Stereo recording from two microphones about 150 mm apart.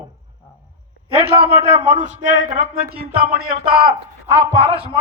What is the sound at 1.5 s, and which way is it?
A man's voice, 45° right (ahead or behind).